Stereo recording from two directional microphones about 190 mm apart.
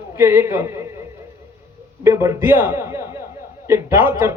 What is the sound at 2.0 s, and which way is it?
A man's voice, 15° right (ahead or behind).